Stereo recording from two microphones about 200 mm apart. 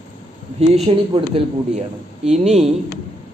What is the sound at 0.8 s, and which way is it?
Speech, 25° right (ahead or behind).